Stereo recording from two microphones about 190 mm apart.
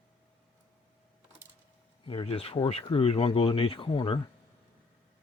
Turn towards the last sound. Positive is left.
turn(degrees=25)  # may be behind; listen again after turning